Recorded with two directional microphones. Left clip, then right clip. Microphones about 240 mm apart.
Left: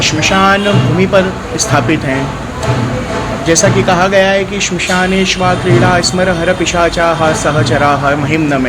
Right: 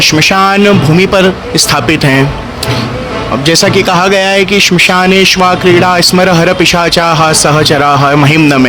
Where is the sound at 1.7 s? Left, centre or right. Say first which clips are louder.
Right 1 dB; right.